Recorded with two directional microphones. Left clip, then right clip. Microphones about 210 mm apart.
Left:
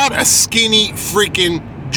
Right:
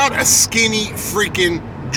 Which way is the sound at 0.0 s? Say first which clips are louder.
Left 1 dB; 30° left (ahead or behind).